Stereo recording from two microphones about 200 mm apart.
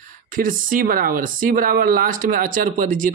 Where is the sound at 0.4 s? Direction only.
45° right (ahead or behind).